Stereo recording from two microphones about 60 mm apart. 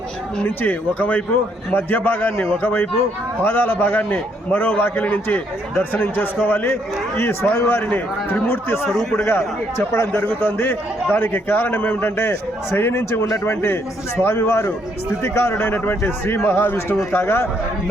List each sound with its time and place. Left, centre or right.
0.4 s a man's voice: left
7.8 s a man's voice: left
9.9 s a man's voice: left